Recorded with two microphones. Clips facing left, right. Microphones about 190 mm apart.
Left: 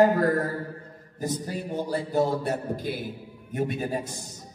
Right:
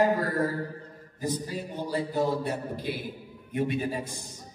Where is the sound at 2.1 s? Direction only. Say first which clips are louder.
Left 4 dB; 45° left (ahead or behind).